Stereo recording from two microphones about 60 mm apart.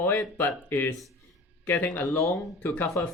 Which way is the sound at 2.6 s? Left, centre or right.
Left.